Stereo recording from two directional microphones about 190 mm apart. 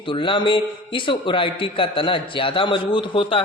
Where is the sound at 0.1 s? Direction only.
25° left (ahead or behind).